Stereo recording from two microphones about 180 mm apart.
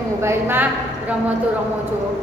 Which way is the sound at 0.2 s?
15° right (ahead or behind).